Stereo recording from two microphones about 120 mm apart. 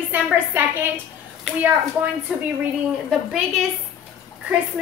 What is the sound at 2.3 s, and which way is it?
A woman's voice, 5° right (ahead or behind).